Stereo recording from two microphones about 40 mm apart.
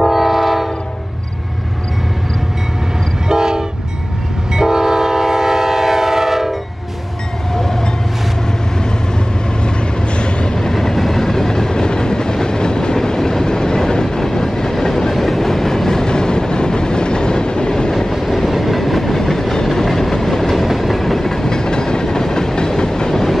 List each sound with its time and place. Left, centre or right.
0.0 s train: centre
3.3 s train: centre
9.6 s vehicle: left
10.6 s train: centre
18.1 s train: centre